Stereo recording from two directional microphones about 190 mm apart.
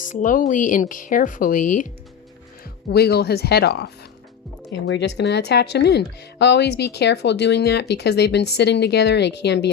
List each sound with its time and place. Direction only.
0.0 s speech: 45° left (ahead or behind)
2.9 s speech: 60° left (ahead or behind)